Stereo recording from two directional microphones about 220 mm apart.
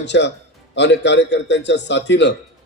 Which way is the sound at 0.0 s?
55° left (ahead or behind).